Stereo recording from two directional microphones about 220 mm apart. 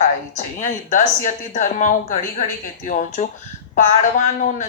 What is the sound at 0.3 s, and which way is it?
Speech, 35° left (ahead or behind).